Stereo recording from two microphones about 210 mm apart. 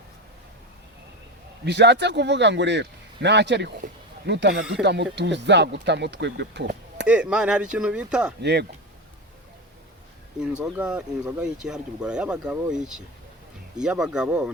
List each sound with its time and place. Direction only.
1.6 s a man's voice: 55° right (ahead or behind)
7.1 s speech: 5° right (ahead or behind)
8.4 s a man's voice: 50° right (ahead or behind)
10.4 s speech: 5° right (ahead or behind)